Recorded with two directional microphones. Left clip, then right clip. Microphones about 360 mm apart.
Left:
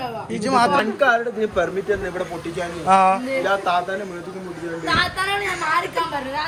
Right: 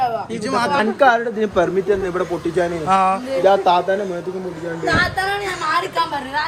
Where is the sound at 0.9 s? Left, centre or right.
Right.